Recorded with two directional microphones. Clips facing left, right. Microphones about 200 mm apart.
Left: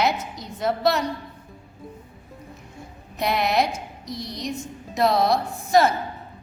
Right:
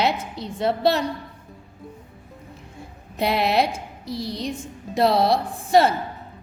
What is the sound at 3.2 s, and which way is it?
A woman's voice, 30° right (ahead or behind).